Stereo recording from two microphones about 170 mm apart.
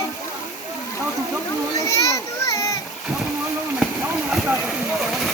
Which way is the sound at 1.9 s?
20° left (ahead or behind).